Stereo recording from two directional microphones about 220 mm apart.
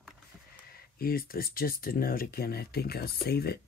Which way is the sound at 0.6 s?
40° left (ahead or behind).